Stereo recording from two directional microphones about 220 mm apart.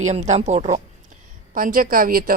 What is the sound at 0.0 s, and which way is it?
A woman's voice, 30° right (ahead or behind).